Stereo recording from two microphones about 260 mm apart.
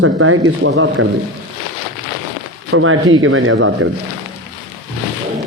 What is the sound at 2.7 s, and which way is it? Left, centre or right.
A man's voice, right.